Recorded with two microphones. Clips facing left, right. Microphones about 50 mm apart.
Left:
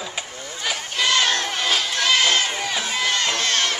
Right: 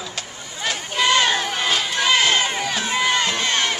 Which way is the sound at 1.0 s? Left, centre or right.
Centre.